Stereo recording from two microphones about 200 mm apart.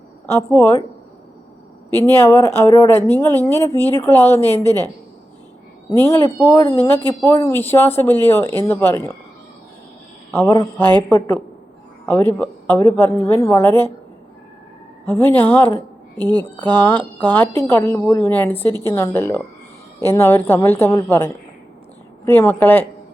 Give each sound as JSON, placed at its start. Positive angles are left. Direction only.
{"t": 0.3, "sound": "a woman's voice", "side_deg": 10}
{"t": 1.9, "sound": "a woman's voice", "side_deg": 10}
{"t": 5.9, "sound": "a woman's voice", "side_deg": 10}
{"t": 10.3, "sound": "a woman's voice", "side_deg": 15}
{"t": 12.0, "sound": "a woman's voice", "side_deg": 10}
{"t": 15.0, "sound": "a woman's voice", "side_deg": 10}
{"t": 16.1, "sound": "speech", "side_deg": -20}
{"t": 16.6, "sound": "a woman's voice", "side_deg": 10}